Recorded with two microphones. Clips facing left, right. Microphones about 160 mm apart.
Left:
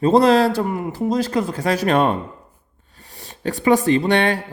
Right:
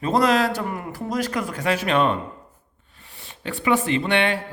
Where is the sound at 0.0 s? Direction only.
30° left (ahead or behind).